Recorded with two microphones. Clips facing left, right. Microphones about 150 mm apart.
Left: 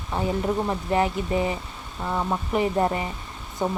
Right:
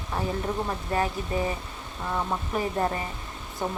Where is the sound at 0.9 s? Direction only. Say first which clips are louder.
Left 4 dB; 20° left (ahead or behind).